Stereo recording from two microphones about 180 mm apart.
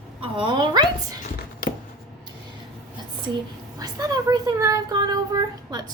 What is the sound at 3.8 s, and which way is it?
Speech, 20° right (ahead or behind).